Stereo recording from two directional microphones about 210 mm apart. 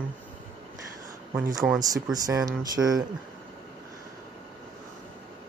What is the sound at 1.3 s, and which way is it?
Speech, 15° right (ahead or behind).